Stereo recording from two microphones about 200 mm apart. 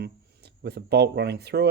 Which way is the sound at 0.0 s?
55° right (ahead or behind).